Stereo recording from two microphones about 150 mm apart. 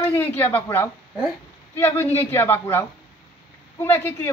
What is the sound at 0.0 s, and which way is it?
A woman's voice, 15° left (ahead or behind).